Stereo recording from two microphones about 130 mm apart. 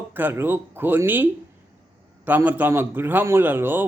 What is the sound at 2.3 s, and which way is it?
A man's voice, 15° right (ahead or behind).